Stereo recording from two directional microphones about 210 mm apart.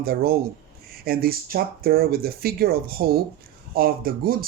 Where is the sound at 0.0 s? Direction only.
45° right (ahead or behind).